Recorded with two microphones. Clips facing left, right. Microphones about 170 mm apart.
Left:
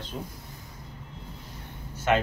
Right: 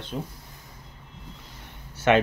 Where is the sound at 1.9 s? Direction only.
75° right (ahead or behind).